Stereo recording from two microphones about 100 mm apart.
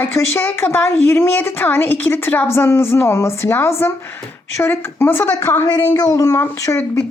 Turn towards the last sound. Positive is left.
turn(degrees=30)  # may be behind; listen again after turning